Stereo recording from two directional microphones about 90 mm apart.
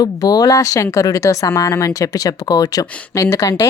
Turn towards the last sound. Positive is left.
turn(degrees=40)  # may be behind; listen again after turning